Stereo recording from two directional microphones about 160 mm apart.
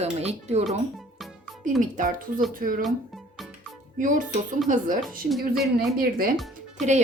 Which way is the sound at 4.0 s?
55° right (ahead or behind).